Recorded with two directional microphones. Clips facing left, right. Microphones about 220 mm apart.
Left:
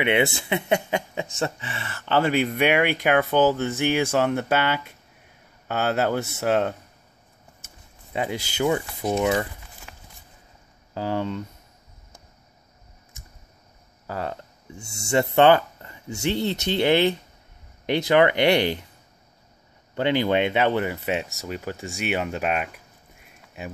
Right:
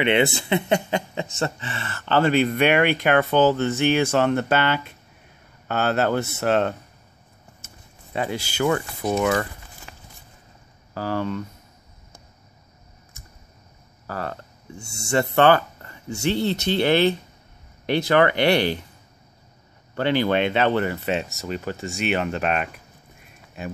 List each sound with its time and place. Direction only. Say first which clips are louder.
0.0 s speech: right 2 dB; 10° left (ahead or behind)
11.0 s speech: right 1 dB; 20° left (ahead or behind)
13.2 s a sound: right 1 dB; 20° left (ahead or behind)
14.0 s speech: even; 20° left (ahead or behind)
20.0 s speech: right 1 dB; 20° left (ahead or behind)